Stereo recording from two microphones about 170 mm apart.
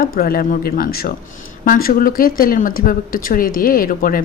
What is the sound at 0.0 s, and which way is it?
Speech, 60° left (ahead or behind).